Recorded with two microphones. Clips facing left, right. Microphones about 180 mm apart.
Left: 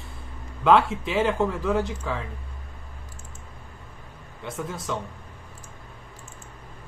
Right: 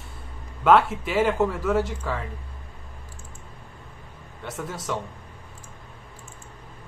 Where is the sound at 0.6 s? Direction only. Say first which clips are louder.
Right 1 dB; 5° right (ahead or behind).